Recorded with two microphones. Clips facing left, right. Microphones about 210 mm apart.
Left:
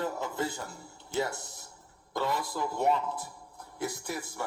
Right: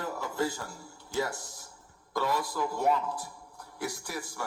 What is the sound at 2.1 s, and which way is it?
A man's voice, 25° left (ahead or behind).